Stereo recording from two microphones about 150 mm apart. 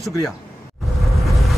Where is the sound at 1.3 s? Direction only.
Centre (ahead or behind).